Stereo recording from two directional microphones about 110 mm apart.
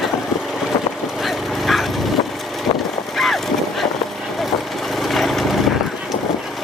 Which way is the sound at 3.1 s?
Centre (ahead or behind).